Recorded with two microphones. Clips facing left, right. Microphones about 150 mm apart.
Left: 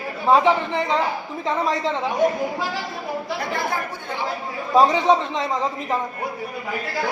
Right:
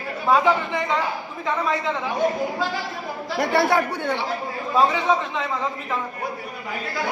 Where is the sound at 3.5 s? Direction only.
75° right (ahead or behind).